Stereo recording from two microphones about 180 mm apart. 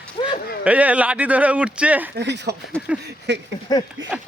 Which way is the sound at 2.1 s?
70° right (ahead or behind).